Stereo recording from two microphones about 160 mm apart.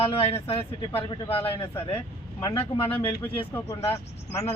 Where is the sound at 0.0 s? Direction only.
40° left (ahead or behind).